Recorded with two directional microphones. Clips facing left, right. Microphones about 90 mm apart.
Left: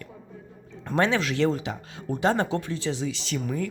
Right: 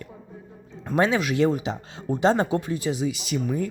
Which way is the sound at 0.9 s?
15° right (ahead or behind).